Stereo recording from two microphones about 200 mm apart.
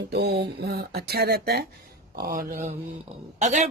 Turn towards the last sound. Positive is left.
turn(degrees=-35)  # may be behind; listen again after turning